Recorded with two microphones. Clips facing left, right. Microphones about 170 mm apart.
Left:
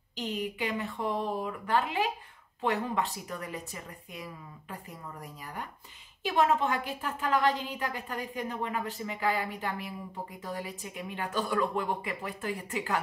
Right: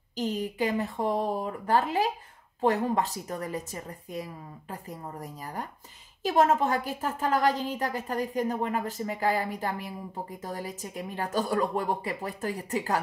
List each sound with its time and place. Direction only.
0.1 s a woman's voice: 40° right (ahead or behind)